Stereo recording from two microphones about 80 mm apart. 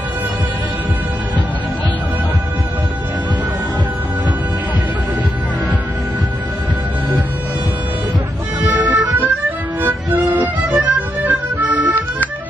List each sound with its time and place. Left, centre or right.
8.6 s music: right